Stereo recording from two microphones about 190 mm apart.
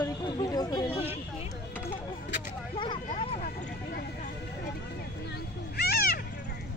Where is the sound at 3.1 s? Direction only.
35° left (ahead or behind).